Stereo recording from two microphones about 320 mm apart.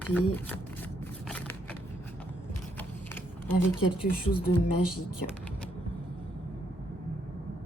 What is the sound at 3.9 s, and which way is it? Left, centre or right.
Speech, centre.